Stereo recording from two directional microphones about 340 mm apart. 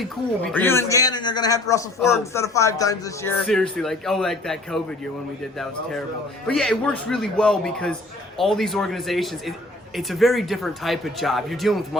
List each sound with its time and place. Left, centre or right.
0.5 s a man's voice: centre
6.5 s speech: centre